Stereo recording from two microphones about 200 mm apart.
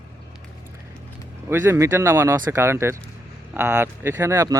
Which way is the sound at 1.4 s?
10° right (ahead or behind).